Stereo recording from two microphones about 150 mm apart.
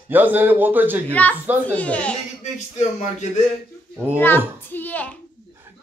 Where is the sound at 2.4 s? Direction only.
50° left (ahead or behind).